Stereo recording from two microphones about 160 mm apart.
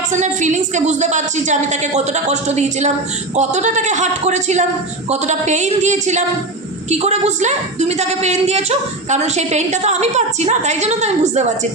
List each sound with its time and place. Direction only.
0.1 s a woman's voice: 50° right (ahead or behind)